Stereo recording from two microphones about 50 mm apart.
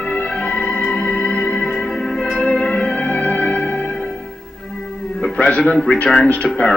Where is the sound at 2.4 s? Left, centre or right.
Centre.